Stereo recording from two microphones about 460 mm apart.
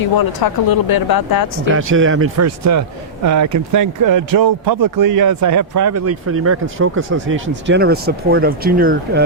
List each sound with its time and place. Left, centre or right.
0.0 s speech: left
1.7 s speech: right